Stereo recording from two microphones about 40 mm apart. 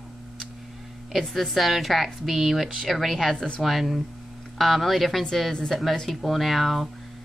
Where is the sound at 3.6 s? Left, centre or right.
Centre.